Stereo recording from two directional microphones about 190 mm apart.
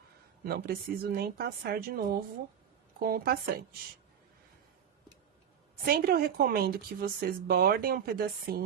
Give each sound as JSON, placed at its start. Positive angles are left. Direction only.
{"t": 0.4, "sound": "a woman's voice", "side_deg": -55}
{"t": 3.0, "sound": "a woman's voice", "side_deg": -55}
{"t": 5.8, "sound": "a woman's voice", "side_deg": -50}